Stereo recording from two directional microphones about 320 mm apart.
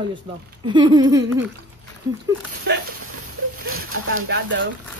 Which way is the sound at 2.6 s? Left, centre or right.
Right.